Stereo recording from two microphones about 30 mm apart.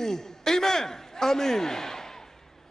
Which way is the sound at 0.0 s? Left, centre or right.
Centre.